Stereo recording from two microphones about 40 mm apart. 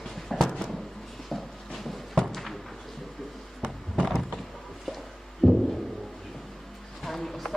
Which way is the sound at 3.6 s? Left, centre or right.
Centre.